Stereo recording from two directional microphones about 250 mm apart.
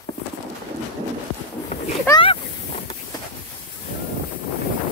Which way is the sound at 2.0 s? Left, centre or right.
Centre.